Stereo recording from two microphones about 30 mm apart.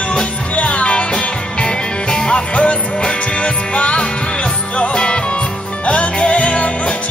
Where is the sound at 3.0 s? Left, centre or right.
Left.